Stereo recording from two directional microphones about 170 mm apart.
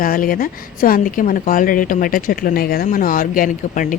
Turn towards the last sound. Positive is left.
turn(degrees=50)  # may be behind; listen again after turning